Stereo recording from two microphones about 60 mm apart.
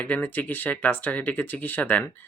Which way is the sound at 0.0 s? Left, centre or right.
Left.